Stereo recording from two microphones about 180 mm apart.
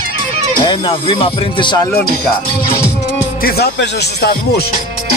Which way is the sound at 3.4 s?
65° left (ahead or behind).